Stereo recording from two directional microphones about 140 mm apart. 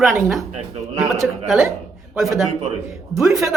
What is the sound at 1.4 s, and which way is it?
Speech, centre (ahead or behind).